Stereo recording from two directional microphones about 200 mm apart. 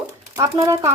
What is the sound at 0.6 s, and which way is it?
Speech, 15° right (ahead or behind).